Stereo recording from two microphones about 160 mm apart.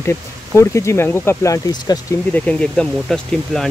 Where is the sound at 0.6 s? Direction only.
20° left (ahead or behind).